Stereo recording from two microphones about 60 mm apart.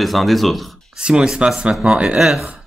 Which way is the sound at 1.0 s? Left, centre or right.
Centre.